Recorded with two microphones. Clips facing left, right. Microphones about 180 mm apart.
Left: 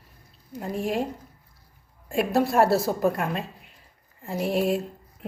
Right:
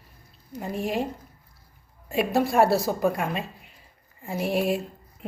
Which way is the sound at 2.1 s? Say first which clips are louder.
Even; centre (ahead or behind).